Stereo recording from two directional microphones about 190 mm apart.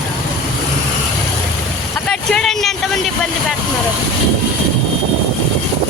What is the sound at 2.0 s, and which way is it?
Speech, centre (ahead or behind).